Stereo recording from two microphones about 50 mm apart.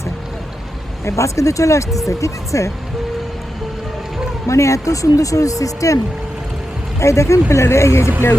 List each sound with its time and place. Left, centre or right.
1.0 s speech: left
4.4 s speech: left
7.0 s speech: left